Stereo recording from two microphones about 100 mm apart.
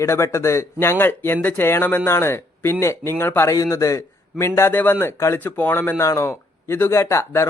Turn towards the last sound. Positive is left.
turn(degrees=25)  # may be behind; listen again after turning